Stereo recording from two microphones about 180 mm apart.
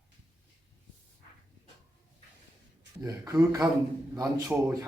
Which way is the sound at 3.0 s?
20° right (ahead or behind).